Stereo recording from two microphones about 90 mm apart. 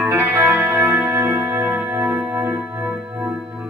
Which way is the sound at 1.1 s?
35° right (ahead or behind).